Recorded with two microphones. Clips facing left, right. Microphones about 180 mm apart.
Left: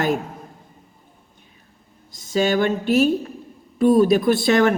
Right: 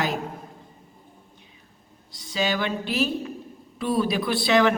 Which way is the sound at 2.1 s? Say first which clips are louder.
Left 7 dB; 45° left (ahead or behind).